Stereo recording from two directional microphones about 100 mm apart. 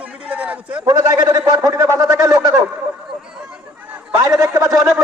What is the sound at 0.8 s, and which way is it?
A man's voice, 40° right (ahead or behind).